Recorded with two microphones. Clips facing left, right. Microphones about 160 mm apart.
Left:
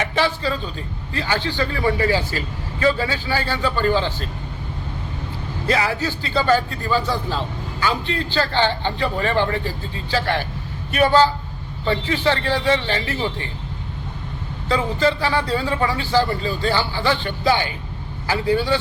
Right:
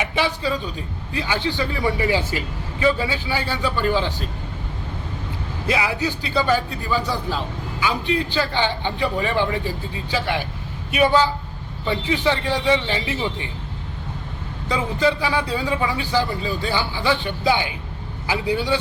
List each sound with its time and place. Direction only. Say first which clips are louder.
0.0 s a man's voice: left 1 dB; 10° right (ahead or behind)
5.6 s a man's voice: left 2 dB; 5° right (ahead or behind)
5.9 s a man's voice: even; 15° right (ahead or behind)
14.7 s a man's voice: left 1 dB; 10° right (ahead or behind)